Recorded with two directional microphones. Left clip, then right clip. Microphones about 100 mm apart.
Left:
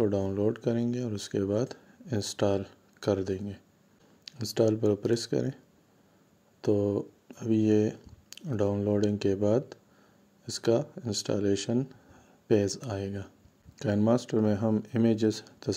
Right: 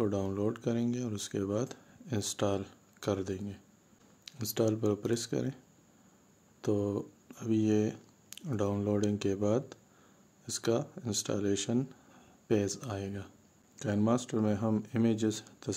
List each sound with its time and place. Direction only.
0.0 s speech: 20° left (ahead or behind)
6.6 s speech: 20° left (ahead or behind)